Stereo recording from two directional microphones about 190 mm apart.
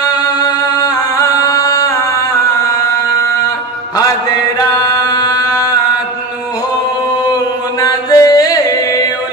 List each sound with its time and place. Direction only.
0.1 s music: 20° left (ahead or behind)
5.0 s a sound: 20° left (ahead or behind)
7.8 s chant: 15° left (ahead or behind)